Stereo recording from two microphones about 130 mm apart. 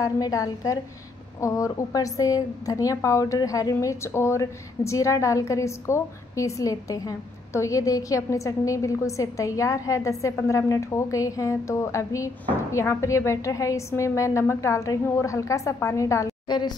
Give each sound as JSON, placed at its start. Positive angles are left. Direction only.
{"t": 0.0, "sound": "a woman's voice", "side_deg": 25}